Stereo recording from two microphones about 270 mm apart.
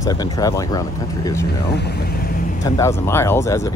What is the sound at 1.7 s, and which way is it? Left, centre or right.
Speech, left.